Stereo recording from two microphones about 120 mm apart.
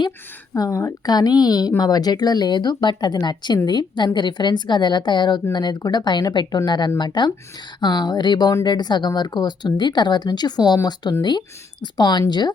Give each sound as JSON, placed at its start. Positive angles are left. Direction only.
{"t": 0.5, "sound": "a woman's voice", "side_deg": 30}